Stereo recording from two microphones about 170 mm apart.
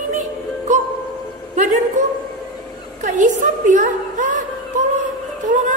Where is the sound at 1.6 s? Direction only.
50° right (ahead or behind).